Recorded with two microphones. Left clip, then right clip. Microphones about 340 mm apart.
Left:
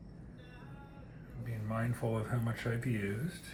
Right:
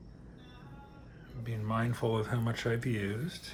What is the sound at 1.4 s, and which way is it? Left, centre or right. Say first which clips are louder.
Speech: right 5 dB; centre.